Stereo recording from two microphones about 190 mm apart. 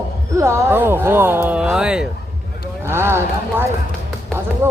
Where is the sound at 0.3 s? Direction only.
15° right (ahead or behind).